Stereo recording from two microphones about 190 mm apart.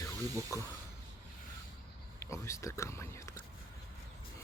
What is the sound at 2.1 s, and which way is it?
Speech, 15° left (ahead or behind).